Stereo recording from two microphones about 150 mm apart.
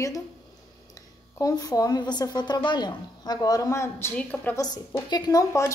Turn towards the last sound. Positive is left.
turn(degrees=20)  # may be behind; listen again after turning